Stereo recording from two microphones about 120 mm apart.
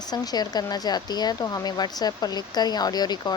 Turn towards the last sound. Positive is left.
turn(degrees=35)  # may be behind; listen again after turning